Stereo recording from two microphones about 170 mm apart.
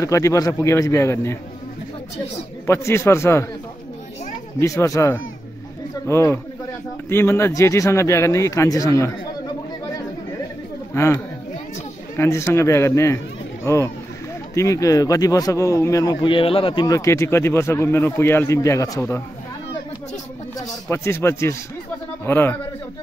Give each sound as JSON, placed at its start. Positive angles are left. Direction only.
{"t": 0.0, "sound": "speech", "side_deg": 20}
{"t": 2.6, "sound": "speech", "side_deg": 15}
{"t": 4.6, "sound": "speech", "side_deg": 20}
{"t": 11.0, "sound": "speech", "side_deg": 15}
{"t": 14.5, "sound": "speech", "side_deg": 20}
{"t": 16.8, "sound": "speech", "side_deg": 20}
{"t": 20.9, "sound": "speech", "side_deg": 15}